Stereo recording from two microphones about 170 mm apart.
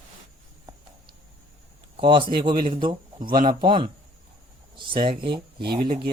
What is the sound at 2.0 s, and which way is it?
Speech, 30° right (ahead or behind).